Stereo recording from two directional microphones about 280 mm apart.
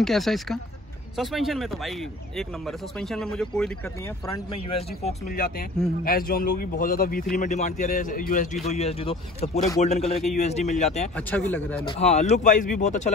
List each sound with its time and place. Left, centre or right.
0.0 s speech: centre
4.6 s a man's voice: left
11.1 s speech: centre
11.9 s speech: left